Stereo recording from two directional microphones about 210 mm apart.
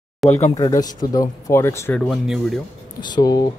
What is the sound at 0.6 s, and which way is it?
Speech, 15° left (ahead or behind).